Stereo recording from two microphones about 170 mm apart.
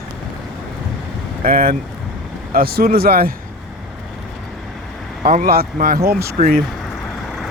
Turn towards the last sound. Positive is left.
turn(degrees=0)  # may be behind; listen again after turning